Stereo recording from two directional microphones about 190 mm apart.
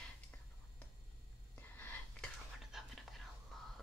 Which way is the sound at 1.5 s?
5° left (ahead or behind).